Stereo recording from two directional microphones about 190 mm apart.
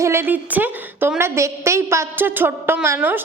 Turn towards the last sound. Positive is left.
turn(degrees=-10)  # may be behind; listen again after turning